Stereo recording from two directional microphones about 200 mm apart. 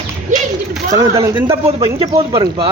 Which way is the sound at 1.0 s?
15° right (ahead or behind).